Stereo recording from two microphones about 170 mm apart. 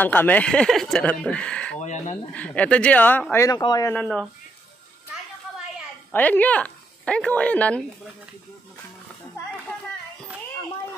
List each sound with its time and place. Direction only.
0.0 s speech: 10° left (ahead or behind)
1.8 s speech: 45° left (ahead or behind)
2.3 s speech: 10° left (ahead or behind); by 3.9 s 25° left (ahead or behind)
3.9 s speech: 10° left (ahead or behind)
6.1 s speech: 10° left (ahead or behind)